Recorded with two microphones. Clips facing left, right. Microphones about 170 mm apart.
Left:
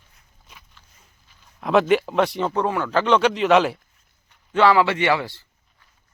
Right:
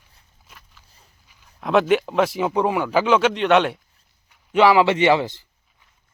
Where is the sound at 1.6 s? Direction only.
Centre (ahead or behind).